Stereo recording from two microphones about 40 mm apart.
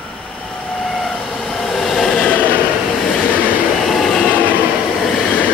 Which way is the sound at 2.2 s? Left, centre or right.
Left.